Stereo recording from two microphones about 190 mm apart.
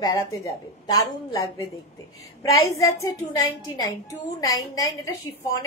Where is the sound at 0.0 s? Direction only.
15° left (ahead or behind).